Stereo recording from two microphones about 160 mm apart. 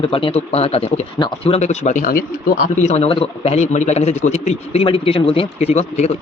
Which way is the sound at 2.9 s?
40° left (ahead or behind).